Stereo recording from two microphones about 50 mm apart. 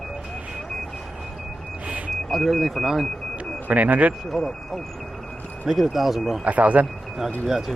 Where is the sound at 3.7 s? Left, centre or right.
Right.